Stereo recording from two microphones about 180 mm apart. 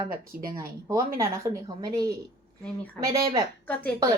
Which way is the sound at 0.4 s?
20° right (ahead or behind).